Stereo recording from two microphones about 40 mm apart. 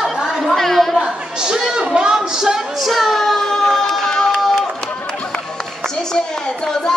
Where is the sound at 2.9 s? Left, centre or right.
Centre.